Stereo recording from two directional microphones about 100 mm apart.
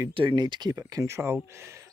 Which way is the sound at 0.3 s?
45° right (ahead or behind).